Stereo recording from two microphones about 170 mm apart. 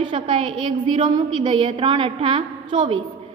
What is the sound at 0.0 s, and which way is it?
A woman's voice, 30° right (ahead or behind).